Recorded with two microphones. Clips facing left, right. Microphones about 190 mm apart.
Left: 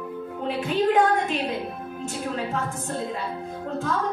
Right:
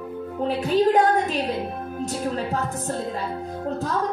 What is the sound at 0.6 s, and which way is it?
Music, 35° right (ahead or behind).